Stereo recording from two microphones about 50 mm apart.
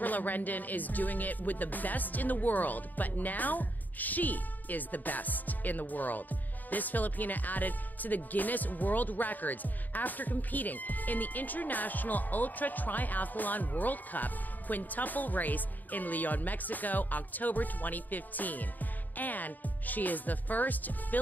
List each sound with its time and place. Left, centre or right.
0.0 s speech: left